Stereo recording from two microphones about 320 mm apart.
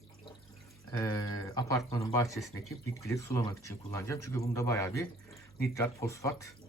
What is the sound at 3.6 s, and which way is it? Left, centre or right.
A man's voice, centre.